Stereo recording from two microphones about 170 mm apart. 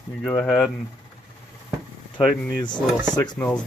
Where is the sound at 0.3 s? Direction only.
10° left (ahead or behind).